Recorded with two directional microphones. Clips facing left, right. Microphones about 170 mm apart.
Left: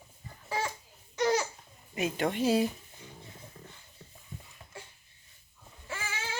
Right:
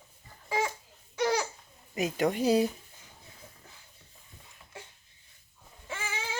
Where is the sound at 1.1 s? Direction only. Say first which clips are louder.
Left 1 dB; centre (ahead or behind).